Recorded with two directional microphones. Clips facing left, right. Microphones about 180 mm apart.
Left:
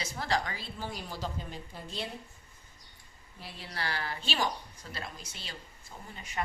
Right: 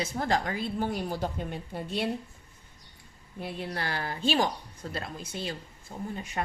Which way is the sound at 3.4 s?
55° right (ahead or behind).